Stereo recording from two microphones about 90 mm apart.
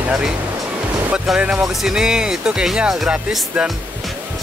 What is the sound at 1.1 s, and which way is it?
Speech, 10° right (ahead or behind).